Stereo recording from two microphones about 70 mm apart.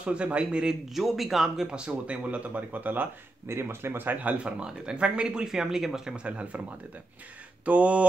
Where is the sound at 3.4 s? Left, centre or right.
Right; by 6.6 s centre.